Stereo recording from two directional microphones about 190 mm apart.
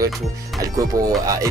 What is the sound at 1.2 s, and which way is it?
Speech, 15° right (ahead or behind).